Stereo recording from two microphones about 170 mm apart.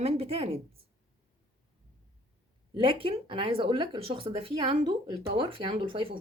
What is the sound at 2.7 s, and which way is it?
Speech, 30° right (ahead or behind).